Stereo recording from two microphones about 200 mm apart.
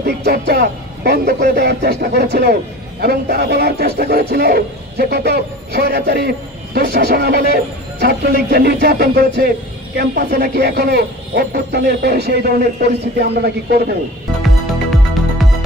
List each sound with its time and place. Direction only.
0.0 s a man's voice: 50° right (ahead or behind)